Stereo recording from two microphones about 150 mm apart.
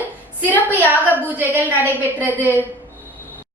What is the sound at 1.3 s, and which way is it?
A woman's voice, 10° right (ahead or behind).